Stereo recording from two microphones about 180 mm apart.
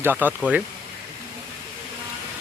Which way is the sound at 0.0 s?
10° right (ahead or behind).